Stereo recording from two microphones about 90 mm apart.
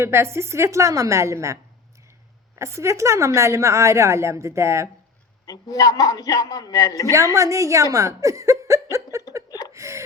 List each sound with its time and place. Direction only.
0.0 s a woman's voice: 30° right (ahead or behind)
2.6 s a woman's voice: 35° right (ahead or behind)
5.5 s speech: 45° left (ahead or behind)
7.3 s speech: 35° right (ahead or behind)
9.7 s a sound: 35° right (ahead or behind)